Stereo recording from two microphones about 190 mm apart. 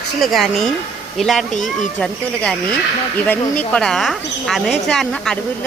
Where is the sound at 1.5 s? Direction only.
40° left (ahead or behind).